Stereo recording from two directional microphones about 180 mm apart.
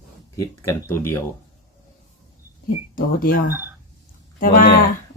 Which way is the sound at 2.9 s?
55° left (ahead or behind).